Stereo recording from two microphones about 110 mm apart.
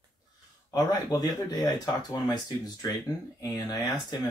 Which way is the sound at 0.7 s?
35° left (ahead or behind).